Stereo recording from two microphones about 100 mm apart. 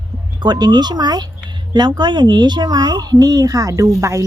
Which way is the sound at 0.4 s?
45° right (ahead or behind).